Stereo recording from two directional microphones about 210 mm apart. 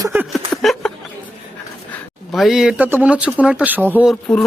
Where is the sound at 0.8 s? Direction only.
Centre (ahead or behind).